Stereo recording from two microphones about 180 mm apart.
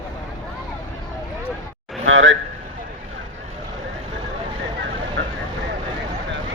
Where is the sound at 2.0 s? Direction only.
90° right.